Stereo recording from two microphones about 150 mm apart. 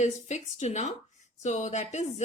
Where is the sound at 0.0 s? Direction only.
50° left (ahead or behind).